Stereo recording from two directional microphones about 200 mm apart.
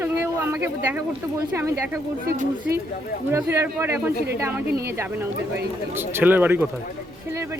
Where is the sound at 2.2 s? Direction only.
50° right (ahead or behind).